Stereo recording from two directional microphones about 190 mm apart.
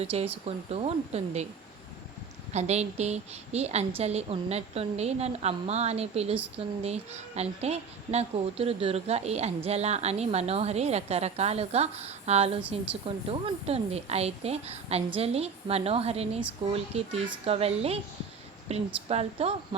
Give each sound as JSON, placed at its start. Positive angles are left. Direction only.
{"t": 0.0, "sound": "a woman's voice", "side_deg": -30}
{"t": 2.5, "sound": "a woman's voice", "side_deg": -35}